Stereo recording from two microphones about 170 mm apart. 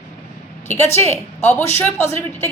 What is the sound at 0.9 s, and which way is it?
A woman's voice, 15° left (ahead or behind).